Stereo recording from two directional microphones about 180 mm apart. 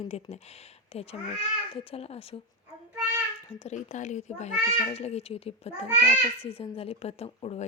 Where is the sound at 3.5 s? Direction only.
40° left (ahead or behind).